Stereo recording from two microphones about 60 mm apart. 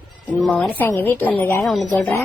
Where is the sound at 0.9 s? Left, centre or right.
Left.